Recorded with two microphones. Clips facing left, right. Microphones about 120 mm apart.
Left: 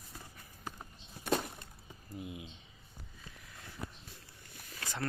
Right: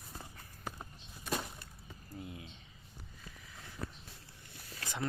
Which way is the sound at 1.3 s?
65° left (ahead or behind).